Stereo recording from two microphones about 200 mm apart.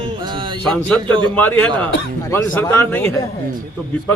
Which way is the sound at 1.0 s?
25° right (ahead or behind).